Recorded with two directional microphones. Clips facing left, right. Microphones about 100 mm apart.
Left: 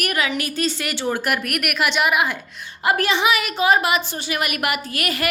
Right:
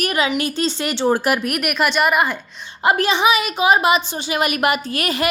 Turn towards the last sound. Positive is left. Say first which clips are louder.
# right 3 dB
turn(degrees=-25)  # may be behind; listen again after turning